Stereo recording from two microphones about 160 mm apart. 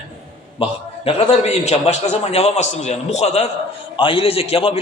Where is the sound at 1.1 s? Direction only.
40° left (ahead or behind).